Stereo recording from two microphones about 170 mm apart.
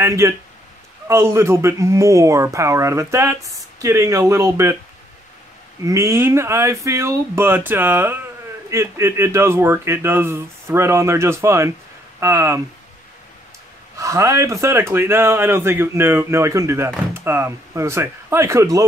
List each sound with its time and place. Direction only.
0.0 s speech: 15° right (ahead or behind)
5.9 s speech: 15° right (ahead or behind)
13.9 s speech: 20° right (ahead or behind)